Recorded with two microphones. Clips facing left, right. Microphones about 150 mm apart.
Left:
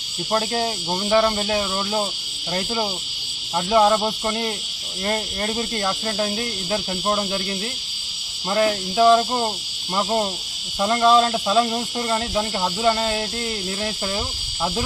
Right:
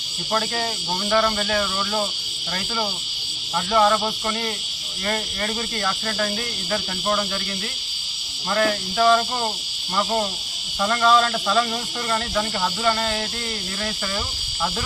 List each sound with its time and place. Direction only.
0.3 s cricket: 25° left (ahead or behind)
8.4 s cricket: 20° left (ahead or behind)